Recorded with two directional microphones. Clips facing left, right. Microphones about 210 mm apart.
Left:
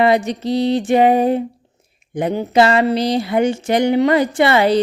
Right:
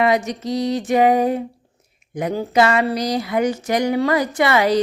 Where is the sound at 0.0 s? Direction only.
30° left (ahead or behind).